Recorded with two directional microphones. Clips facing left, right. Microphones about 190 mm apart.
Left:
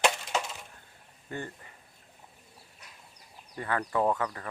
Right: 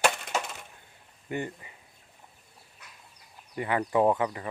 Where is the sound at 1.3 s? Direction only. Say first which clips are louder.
Right 5 dB; 15° right (ahead or behind).